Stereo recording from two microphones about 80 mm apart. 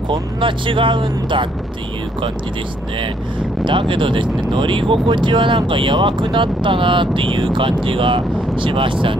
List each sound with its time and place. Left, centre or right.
0.1 s speech: right
3.6 s speech: right